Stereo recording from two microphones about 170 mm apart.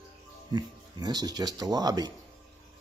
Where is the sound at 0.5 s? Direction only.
25° right (ahead or behind).